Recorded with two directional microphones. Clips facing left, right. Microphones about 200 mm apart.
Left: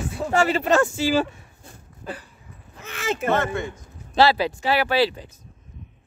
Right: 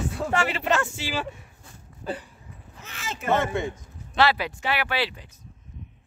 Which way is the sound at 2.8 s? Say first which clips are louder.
Left 10 dB; 65° left (ahead or behind).